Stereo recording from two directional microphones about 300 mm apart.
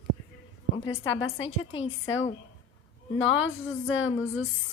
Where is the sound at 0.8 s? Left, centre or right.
Left.